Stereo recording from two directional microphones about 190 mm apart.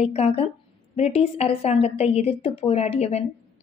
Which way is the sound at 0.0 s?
35° left (ahead or behind).